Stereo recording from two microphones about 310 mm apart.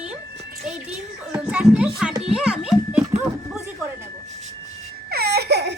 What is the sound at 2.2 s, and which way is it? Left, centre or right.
Children playing, centre.